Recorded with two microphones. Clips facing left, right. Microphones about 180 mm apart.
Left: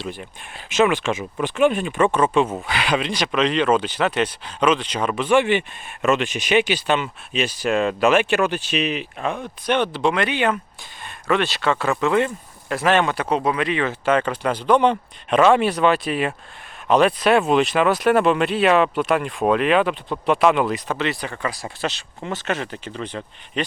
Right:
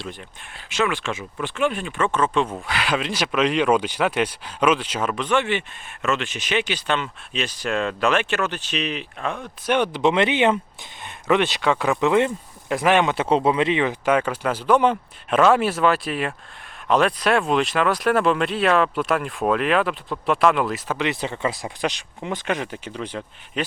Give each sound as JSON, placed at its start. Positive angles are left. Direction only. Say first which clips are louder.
{"t": 0.0, "sound": "speech", "louder": "left 4 dB", "side_deg": 10}
{"t": 9.7, "sound": "speech", "louder": "right 2 dB", "side_deg": -15}
{"t": 21.1, "sound": "speech", "louder": "right 2 dB", "side_deg": -25}